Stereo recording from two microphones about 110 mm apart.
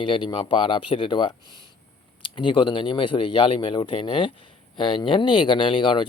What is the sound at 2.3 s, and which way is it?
Speech, 45° left (ahead or behind).